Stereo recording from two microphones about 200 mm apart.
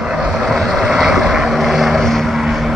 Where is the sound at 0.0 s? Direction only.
Centre (ahead or behind).